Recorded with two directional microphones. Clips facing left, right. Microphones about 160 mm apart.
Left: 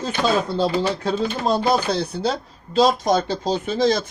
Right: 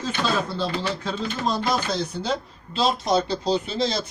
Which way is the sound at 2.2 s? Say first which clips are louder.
Left 3 dB; 45° left (ahead or behind).